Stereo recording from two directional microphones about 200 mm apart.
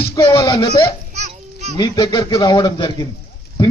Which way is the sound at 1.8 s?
20° left (ahead or behind).